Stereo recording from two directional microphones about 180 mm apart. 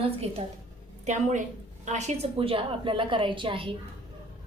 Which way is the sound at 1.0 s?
45° right (ahead or behind).